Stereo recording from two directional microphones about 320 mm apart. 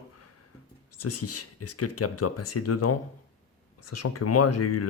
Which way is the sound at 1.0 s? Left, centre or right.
Left.